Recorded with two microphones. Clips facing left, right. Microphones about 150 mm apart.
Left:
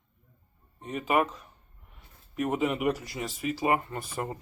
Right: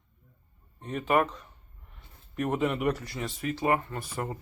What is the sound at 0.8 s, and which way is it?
Speech, 5° left (ahead or behind).